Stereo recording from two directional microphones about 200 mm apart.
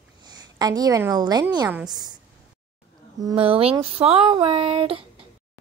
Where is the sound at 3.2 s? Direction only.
25° right (ahead or behind).